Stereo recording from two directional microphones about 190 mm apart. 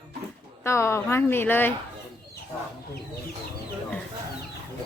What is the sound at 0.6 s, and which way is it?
Speech, 15° left (ahead or behind).